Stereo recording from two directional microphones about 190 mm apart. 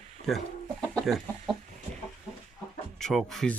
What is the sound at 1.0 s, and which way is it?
Chicken, centre (ahead or behind).